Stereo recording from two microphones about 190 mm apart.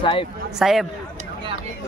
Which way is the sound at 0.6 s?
Centre (ahead or behind).